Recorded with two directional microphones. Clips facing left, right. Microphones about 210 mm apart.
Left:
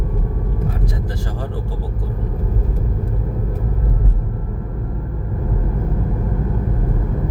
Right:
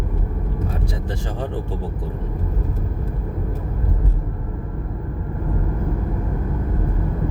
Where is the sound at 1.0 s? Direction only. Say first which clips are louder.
Even; 25° right (ahead or behind).